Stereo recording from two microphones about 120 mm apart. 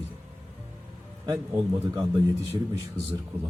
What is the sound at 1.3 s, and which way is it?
Speech, 25° right (ahead or behind).